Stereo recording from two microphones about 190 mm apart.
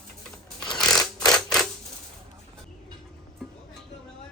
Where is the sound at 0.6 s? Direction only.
5° left (ahead or behind).